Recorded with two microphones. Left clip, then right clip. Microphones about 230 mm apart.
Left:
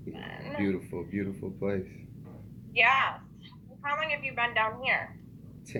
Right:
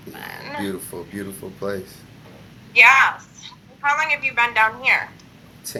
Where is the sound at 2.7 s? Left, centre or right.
Centre.